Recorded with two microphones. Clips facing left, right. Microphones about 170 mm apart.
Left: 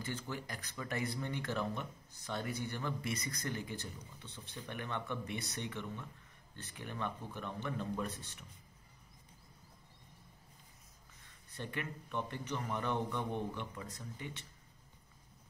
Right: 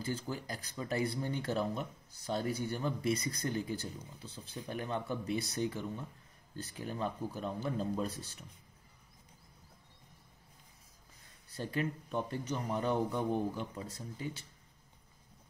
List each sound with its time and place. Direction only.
0.0 s speech: 30° right (ahead or behind)
11.5 s speech: 35° right (ahead or behind)